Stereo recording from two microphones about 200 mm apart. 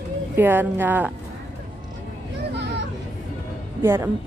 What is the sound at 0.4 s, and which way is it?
Speech, 10° right (ahead or behind).